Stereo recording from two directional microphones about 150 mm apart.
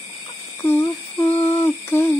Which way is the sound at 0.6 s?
15° left (ahead or behind).